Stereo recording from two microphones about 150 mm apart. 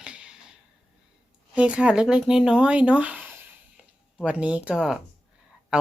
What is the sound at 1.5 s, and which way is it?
Speech, 10° right (ahead or behind).